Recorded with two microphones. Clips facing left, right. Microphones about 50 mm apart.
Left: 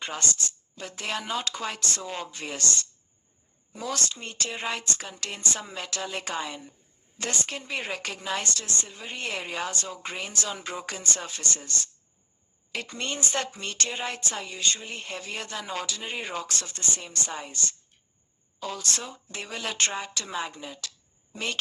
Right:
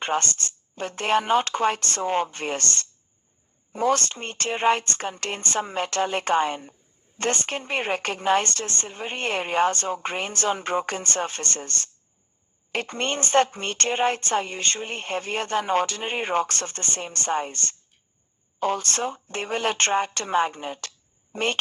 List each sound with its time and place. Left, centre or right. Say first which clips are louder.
0.0 s speech: right 7 dB; right